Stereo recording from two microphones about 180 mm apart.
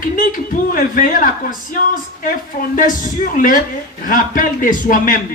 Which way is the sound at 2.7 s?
50° left (ahead or behind).